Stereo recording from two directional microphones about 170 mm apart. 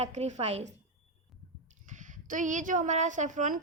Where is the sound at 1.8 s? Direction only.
45° right (ahead or behind).